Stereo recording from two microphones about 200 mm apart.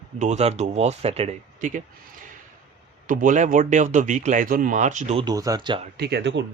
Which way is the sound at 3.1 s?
40° right (ahead or behind).